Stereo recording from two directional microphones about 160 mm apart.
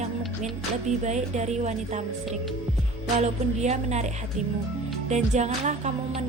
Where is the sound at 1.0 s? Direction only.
45° right (ahead or behind).